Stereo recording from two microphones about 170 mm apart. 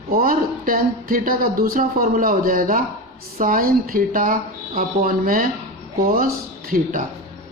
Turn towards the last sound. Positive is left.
turn(degrees=-55)  # may be behind; listen again after turning